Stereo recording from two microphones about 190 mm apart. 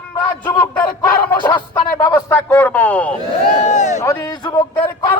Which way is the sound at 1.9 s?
15° left (ahead or behind).